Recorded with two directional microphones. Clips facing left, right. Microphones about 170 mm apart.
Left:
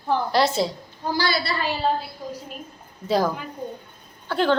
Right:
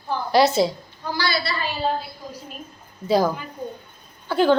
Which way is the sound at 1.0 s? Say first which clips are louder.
Left 1 dB; 45° left (ahead or behind).